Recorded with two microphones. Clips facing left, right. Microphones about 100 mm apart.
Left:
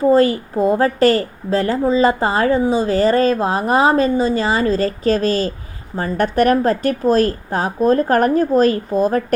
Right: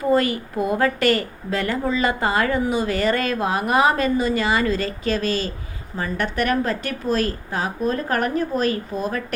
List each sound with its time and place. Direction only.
0.0 s a woman's voice: 30° left (ahead or behind)